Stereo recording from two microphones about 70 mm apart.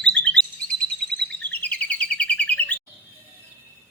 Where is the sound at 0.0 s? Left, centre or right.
Centre.